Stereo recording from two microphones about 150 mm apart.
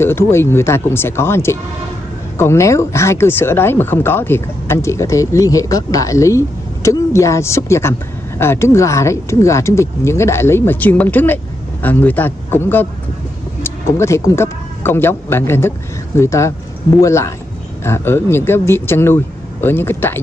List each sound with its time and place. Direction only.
0.0 s speech: 15° left (ahead or behind)